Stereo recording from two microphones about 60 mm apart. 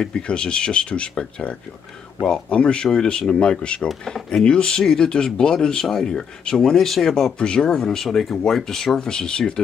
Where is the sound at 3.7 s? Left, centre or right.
Centre.